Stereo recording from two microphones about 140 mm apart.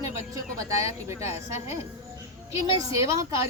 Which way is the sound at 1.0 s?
20° right (ahead or behind).